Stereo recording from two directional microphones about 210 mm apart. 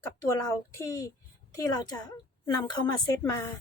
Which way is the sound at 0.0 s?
15° left (ahead or behind).